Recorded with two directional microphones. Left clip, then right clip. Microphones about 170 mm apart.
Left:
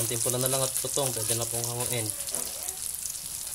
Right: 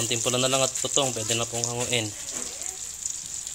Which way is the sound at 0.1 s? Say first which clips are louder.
Right 7 dB; 25° right (ahead or behind).